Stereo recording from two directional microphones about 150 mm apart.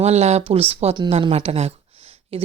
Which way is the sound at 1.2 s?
45° right (ahead or behind).